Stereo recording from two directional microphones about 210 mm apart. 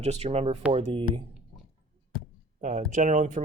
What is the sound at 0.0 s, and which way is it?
Speech, 30° right (ahead or behind).